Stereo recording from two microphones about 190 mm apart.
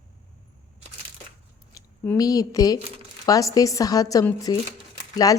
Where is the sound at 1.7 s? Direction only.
20° left (ahead or behind).